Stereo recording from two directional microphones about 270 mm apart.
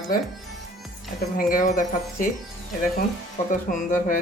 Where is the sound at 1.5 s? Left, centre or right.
Left.